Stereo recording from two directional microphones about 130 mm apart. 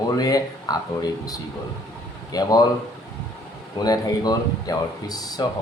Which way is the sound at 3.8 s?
30° left (ahead or behind).